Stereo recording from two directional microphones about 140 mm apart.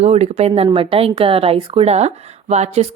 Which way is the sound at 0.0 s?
50° right (ahead or behind).